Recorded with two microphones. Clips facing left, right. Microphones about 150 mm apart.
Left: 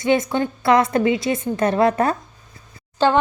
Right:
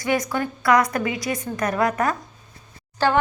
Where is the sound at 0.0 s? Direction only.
25° left (ahead or behind).